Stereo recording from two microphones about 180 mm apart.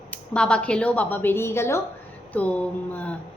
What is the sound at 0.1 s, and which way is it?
A woman's voice, 5° left (ahead or behind).